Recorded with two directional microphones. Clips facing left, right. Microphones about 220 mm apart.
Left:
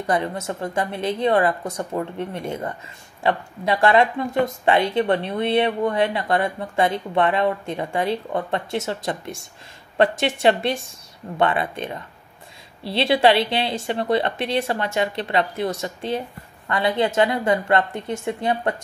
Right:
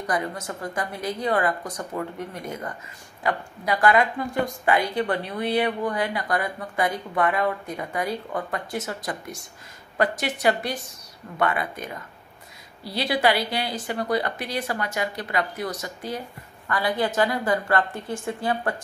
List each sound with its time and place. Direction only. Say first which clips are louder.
0.0 s speech: left 4 dB; 25° left (ahead or behind)